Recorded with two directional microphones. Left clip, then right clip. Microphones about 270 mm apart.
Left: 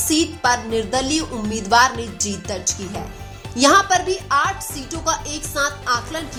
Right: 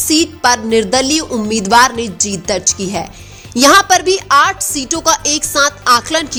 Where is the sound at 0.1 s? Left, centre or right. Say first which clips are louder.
Right 6 dB; right.